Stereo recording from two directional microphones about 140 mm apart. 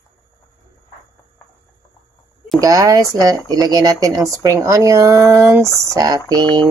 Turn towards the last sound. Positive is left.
turn(degrees=-25)  # may be behind; listen again after turning